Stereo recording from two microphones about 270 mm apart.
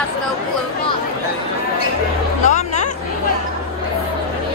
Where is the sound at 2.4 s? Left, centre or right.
Left.